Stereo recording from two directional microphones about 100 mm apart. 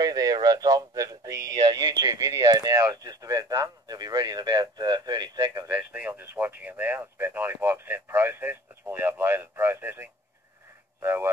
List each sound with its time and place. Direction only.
0.0 s speech: 40° right (ahead or behind)
5.8 s speech: 15° right (ahead or behind)